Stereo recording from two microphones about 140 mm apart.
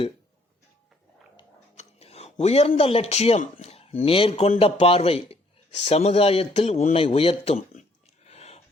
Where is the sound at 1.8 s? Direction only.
45° left (ahead or behind).